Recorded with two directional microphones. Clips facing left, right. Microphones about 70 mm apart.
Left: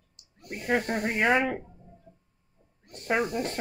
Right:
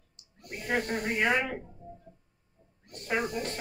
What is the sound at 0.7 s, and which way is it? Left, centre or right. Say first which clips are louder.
Speech: left 3 dB; left.